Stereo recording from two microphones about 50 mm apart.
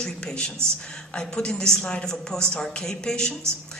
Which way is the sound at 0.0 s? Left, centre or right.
Centre.